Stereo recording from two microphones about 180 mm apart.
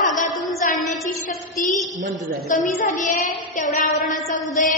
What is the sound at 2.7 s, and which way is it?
Child singing, 45° left (ahead or behind).